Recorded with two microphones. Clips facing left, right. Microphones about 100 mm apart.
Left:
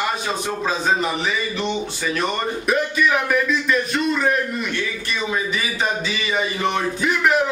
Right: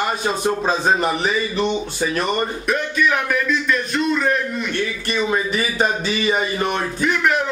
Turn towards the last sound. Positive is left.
turn(degrees=0)  # may be behind; listen again after turning